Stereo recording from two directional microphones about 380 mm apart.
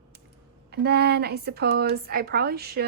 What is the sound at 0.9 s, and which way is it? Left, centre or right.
Speech, right.